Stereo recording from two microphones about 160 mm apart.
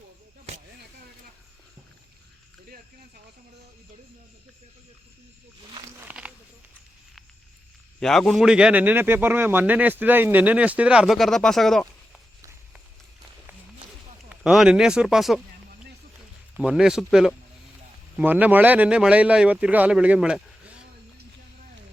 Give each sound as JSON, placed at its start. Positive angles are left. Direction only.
{"t": 0.5, "sound": "a sound", "side_deg": -40}
{"t": 6.0, "sound": "a man's voice", "side_deg": -10}
{"t": 7.9, "sound": "a man's voice", "side_deg": 5}
{"t": 14.3, "sound": "speech", "side_deg": -5}
{"t": 16.6, "sound": "a man's voice", "side_deg": -5}